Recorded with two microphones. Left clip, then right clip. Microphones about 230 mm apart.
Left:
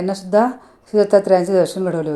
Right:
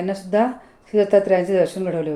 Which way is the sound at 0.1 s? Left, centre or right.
Left.